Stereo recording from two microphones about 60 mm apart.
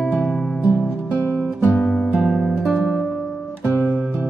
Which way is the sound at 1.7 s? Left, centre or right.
Centre.